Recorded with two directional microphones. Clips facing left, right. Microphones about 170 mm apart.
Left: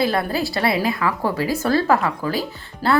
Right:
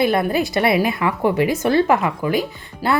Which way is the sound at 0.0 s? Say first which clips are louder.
Right 3 dB; 20° right (ahead or behind).